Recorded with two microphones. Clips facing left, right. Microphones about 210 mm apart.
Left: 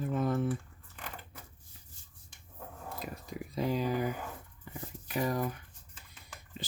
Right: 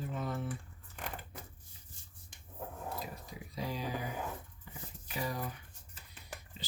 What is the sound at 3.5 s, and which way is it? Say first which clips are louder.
Speech: left 8 dB; 55° left (ahead or behind).